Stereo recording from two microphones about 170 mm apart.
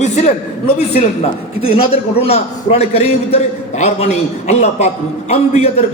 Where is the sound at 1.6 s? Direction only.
35° left (ahead or behind).